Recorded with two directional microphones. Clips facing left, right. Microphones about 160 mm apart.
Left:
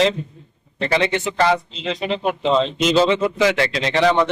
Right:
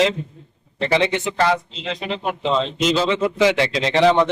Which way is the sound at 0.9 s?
25° right (ahead or behind).